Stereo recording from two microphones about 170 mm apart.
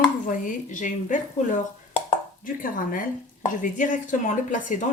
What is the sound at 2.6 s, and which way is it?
Speech, 55° left (ahead or behind).